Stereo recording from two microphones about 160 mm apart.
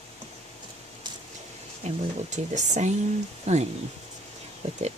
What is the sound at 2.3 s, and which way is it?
Speech, 45° right (ahead or behind).